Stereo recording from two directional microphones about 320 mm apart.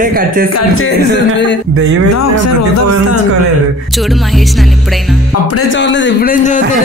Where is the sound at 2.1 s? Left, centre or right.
Left.